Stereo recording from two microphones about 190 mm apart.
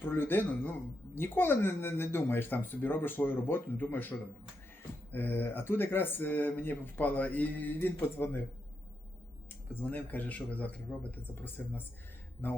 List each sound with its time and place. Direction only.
0.0 s speech: 10° left (ahead or behind)
5.1 s speech: 10° left (ahead or behind)
9.8 s speech: 10° left (ahead or behind)